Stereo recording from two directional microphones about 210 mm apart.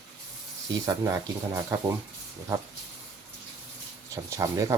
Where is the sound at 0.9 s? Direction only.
15° right (ahead or behind).